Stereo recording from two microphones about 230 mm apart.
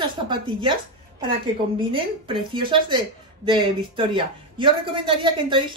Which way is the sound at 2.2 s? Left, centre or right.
Right.